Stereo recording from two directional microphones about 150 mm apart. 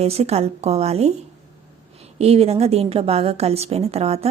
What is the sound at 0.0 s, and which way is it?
A woman's voice, 45° right (ahead or behind).